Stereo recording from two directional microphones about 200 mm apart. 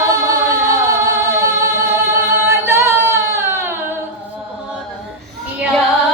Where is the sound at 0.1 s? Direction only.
15° right (ahead or behind).